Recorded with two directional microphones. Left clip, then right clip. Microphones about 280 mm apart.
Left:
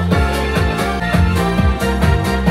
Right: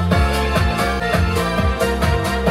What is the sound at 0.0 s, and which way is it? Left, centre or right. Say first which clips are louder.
Music: left 1 dB; centre.